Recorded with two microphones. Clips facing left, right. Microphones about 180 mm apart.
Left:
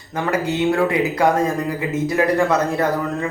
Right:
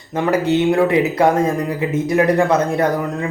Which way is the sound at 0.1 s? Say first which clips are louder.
Right 5 dB; 25° right (ahead or behind).